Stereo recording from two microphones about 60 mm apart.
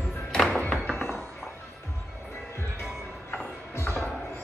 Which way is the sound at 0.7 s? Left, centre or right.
Centre.